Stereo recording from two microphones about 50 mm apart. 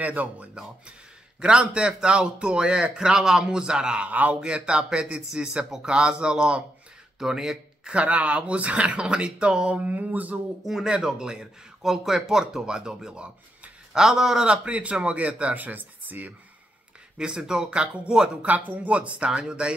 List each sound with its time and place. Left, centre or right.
0.0 s mantra: right
1.4 s speech: centre
7.2 s speech: centre
7.9 s speech: right
9.8 s mantra: right
10.6 s speech: centre; by 13.7 s right
13.9 s speech: centre; by 16.3 s right
17.2 s speech: centre
18.4 s speech: right